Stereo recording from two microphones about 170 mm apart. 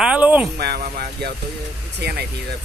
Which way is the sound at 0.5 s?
65° right (ahead or behind).